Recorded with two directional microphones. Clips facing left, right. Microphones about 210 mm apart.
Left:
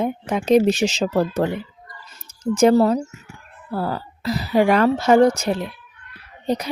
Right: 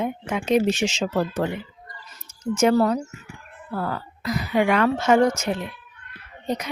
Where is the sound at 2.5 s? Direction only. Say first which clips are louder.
Left 4 dB; 30° left (ahead or behind).